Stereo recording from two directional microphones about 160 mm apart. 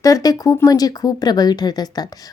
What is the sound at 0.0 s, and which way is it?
Speech, 20° left (ahead or behind).